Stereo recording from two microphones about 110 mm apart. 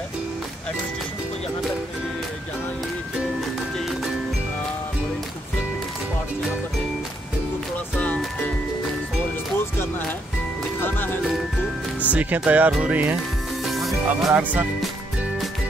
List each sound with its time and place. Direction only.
10.8 s speech: 20° left (ahead or behind)
12.1 s speech: 10° right (ahead or behind)
13.7 s music: centre (ahead or behind)
14.3 s speech: 15° right (ahead or behind)